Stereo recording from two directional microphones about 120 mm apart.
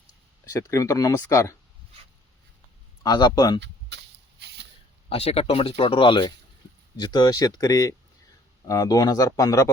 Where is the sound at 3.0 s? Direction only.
35° left (ahead or behind).